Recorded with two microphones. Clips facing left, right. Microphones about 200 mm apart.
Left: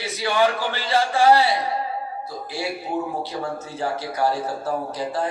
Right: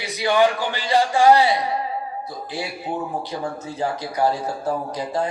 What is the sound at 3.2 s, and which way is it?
A man's voice, 15° right (ahead or behind).